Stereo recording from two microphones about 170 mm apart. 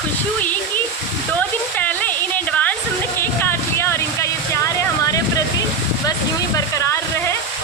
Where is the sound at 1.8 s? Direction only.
10° left (ahead or behind).